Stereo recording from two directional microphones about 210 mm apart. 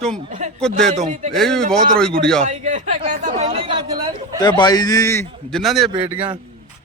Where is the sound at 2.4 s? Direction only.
35° right (ahead or behind).